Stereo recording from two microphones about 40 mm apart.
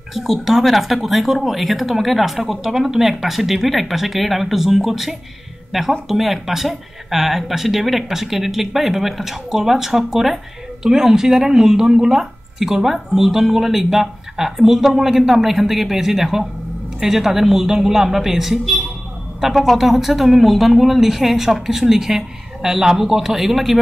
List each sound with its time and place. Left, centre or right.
0.1 s speech: centre